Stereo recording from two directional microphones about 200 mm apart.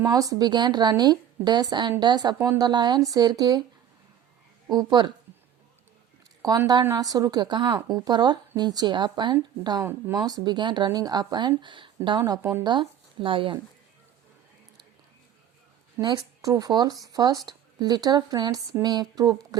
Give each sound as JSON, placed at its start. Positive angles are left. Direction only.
{"t": 0.0, "sound": "speech", "side_deg": -15}
{"t": 4.7, "sound": "speech", "side_deg": -20}
{"t": 6.4, "sound": "speech", "side_deg": -20}
{"t": 12.2, "sound": "speech", "side_deg": -10}
{"t": 12.6, "sound": "speech", "side_deg": -25}
{"t": 16.0, "sound": "speech", "side_deg": -20}